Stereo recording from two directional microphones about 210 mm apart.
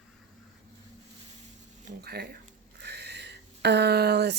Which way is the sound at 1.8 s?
50° right (ahead or behind).